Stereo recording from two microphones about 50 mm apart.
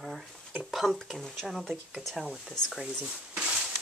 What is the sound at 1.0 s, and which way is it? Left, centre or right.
Speech, centre.